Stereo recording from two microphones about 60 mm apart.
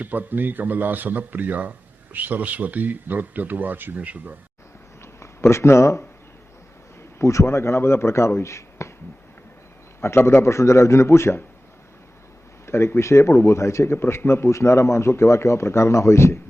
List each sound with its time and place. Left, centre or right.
0.0 s speech: right
5.2 s speech: left
7.2 s a man's voice: left
10.2 s a man's voice: left
12.6 s a man's voice: left
13.9 s a man's voice: left